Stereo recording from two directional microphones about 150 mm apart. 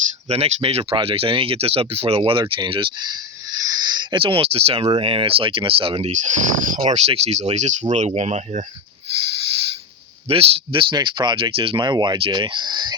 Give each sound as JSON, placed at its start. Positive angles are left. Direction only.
{"t": 0.3, "sound": "speech", "side_deg": -45}
{"t": 6.1, "sound": "speech", "side_deg": -55}
{"t": 10.2, "sound": "speech", "side_deg": -40}